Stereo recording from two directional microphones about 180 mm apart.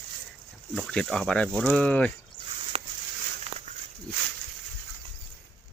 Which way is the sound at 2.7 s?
35° right (ahead or behind).